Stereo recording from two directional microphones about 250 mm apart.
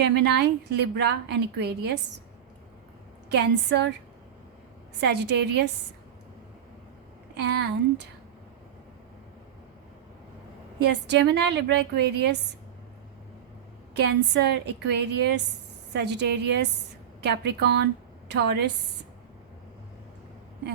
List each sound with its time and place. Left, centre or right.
0.0 s a woman's voice: right
3.3 s a woman's voice: right
4.9 s a woman's voice: right
7.3 s a woman's voice: right
10.8 s a woman's voice: right
13.9 s a woman's voice: right